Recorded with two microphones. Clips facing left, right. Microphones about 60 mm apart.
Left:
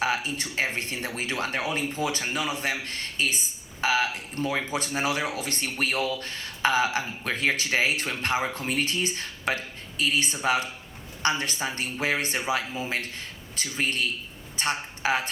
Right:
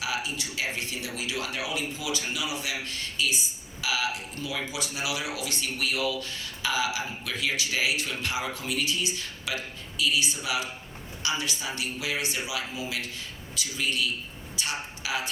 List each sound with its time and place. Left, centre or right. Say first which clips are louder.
0.0 s speech: left 4 dB; left